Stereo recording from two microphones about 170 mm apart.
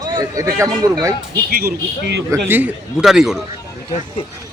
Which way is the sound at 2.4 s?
10° right (ahead or behind).